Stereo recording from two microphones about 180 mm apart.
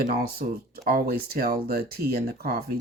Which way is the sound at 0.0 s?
60° right (ahead or behind).